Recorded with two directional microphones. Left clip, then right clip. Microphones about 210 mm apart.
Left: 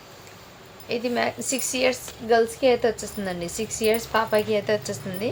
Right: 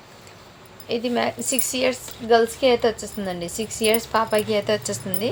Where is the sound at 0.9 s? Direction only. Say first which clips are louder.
Right 2 dB; 20° right (ahead or behind).